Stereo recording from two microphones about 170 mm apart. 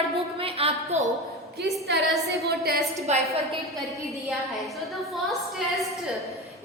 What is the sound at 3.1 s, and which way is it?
Speech, 40° right (ahead or behind).